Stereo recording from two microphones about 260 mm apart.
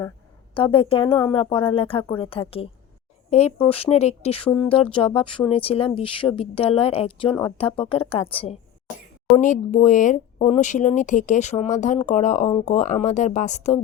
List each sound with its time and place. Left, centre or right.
0.5 s speech: left